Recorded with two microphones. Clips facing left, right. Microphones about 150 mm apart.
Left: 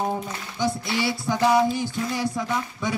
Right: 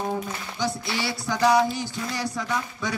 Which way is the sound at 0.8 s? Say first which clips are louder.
Left 3 dB; 20° left (ahead or behind).